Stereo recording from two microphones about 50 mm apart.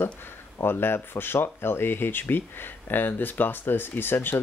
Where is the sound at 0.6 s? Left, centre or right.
Left.